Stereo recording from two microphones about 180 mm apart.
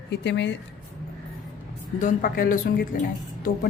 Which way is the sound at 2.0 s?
50° left (ahead or behind).